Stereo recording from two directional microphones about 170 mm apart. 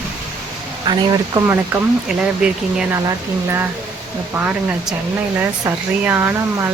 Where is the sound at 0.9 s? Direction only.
25° right (ahead or behind).